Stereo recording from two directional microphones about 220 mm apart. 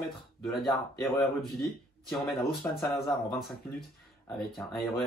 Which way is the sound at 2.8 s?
Centre (ahead or behind).